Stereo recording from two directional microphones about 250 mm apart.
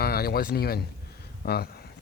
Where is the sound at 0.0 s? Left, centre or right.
Left.